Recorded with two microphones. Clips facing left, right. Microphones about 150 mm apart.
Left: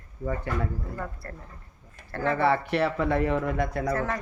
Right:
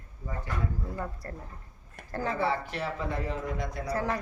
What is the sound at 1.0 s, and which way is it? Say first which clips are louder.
Speech: left 1 dB; 15° right (ahead or behind).